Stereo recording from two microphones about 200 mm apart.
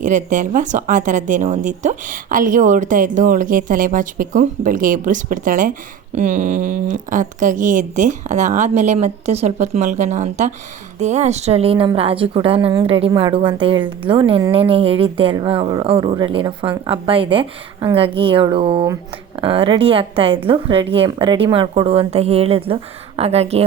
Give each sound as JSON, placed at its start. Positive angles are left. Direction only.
{"t": 0.0, "sound": "a woman's voice", "side_deg": -40}